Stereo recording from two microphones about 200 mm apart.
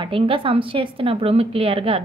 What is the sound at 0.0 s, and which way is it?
A woman's voice, 25° right (ahead or behind).